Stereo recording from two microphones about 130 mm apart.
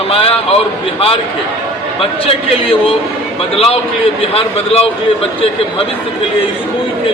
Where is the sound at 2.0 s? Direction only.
45° left (ahead or behind).